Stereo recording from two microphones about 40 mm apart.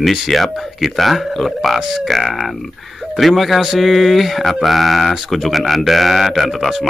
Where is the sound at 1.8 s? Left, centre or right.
Centre.